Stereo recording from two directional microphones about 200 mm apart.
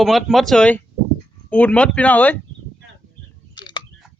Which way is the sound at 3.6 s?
20° left (ahead or behind).